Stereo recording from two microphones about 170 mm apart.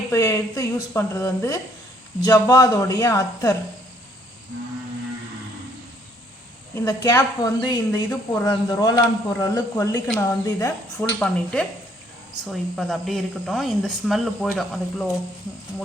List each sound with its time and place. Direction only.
0.1 s a woman's voice: 20° left (ahead or behind)
6.8 s a woman's voice: 20° left (ahead or behind)
10.9 s speech: 5° left (ahead or behind)